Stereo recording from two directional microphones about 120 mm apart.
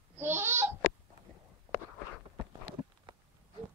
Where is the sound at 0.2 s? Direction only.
20° right (ahead or behind).